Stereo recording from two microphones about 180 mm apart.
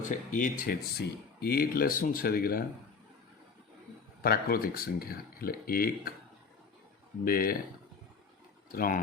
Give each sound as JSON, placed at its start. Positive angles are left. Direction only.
{"t": 0.0, "sound": "speech", "side_deg": 45}
{"t": 4.2, "sound": "speech", "side_deg": 55}
{"t": 7.3, "sound": "speech", "side_deg": 55}
{"t": 8.7, "sound": "speech", "side_deg": 50}